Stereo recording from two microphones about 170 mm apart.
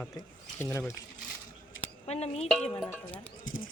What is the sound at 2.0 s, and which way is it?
Speech, 40° left (ahead or behind).